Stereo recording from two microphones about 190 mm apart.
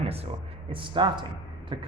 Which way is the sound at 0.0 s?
30° right (ahead or behind).